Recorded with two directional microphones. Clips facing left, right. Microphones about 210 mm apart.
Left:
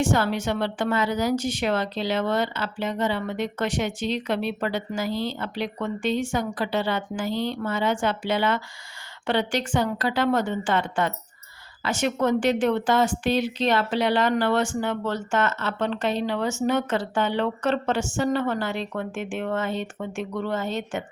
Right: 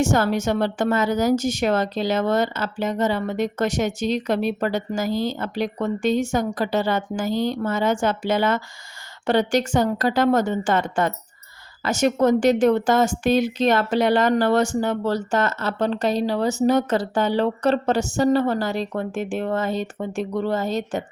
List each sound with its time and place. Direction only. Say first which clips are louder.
0.0 s a woman's voice: right 3 dB; 45° right (ahead or behind)